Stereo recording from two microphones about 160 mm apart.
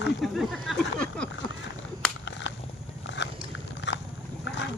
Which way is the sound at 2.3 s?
90° left.